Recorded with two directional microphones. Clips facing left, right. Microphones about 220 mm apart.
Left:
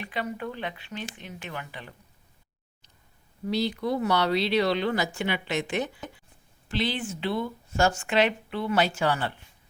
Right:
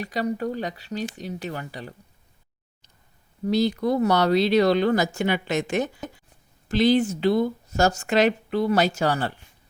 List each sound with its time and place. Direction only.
0.0 s speech: 40° right (ahead or behind)
3.4 s speech: 45° right (ahead or behind)